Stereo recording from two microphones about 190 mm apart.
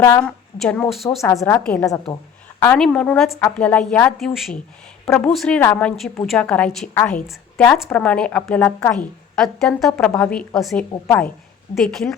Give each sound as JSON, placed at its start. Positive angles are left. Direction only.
{"t": 0.0, "sound": "a woman's voice", "side_deg": 15}
{"t": 0.6, "sound": "a woman's voice", "side_deg": 5}
{"t": 11.0, "sound": "a woman's voice", "side_deg": 10}